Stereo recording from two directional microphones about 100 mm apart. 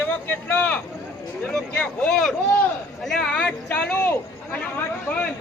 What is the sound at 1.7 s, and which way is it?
Speech, 15° left (ahead or behind).